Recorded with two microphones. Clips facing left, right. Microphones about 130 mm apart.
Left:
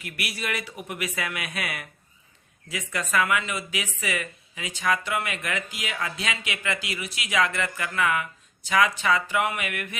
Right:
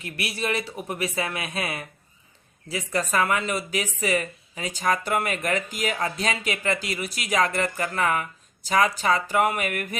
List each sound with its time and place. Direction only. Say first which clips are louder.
0.0 s speech: right 4 dB; 30° right (ahead or behind)